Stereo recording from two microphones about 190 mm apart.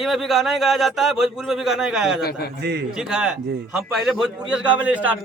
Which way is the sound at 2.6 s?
60° right (ahead or behind).